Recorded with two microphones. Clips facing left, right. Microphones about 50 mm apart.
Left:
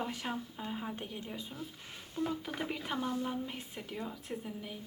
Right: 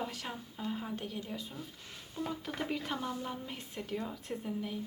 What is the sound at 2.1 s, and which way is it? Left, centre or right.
Speech, centre.